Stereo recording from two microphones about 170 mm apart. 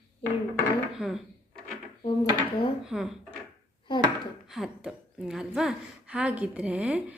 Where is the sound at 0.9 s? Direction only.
Centre (ahead or behind).